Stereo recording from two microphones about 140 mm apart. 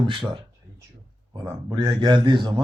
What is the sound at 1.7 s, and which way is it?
Speech, 30° right (ahead or behind).